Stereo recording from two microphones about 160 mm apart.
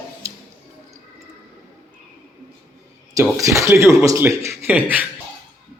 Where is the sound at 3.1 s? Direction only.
20° right (ahead or behind).